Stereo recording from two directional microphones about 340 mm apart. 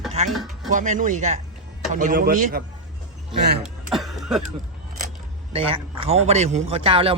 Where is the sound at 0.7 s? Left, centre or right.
Right.